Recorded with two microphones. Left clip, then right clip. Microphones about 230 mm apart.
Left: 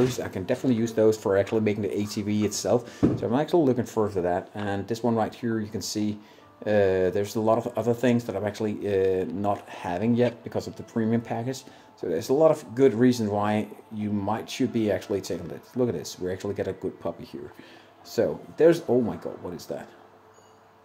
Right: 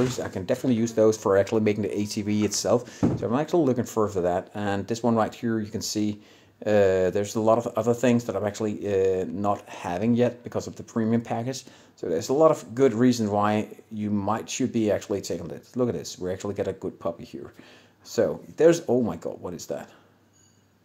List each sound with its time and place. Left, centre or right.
0.1 s speech: centre